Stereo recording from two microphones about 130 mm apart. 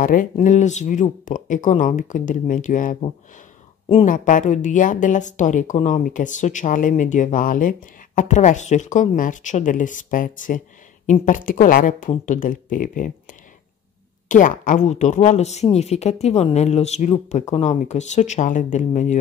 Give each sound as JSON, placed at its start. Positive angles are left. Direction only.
{"t": 0.0, "sound": "speech", "side_deg": 90}
{"t": 4.0, "sound": "a woman's voice", "side_deg": 80}